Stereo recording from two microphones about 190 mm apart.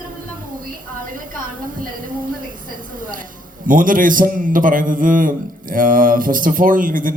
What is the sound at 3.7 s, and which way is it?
A man's voice, 45° right (ahead or behind).